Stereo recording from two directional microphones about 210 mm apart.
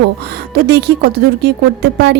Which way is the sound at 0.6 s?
50° right (ahead or behind).